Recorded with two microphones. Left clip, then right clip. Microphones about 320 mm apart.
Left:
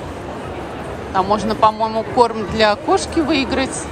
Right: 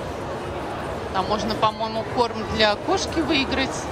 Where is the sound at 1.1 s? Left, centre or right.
Centre.